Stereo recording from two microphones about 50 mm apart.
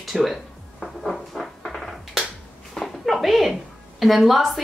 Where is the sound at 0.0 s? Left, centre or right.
Centre.